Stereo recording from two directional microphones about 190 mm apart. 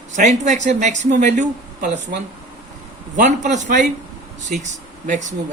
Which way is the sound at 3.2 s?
40° right (ahead or behind).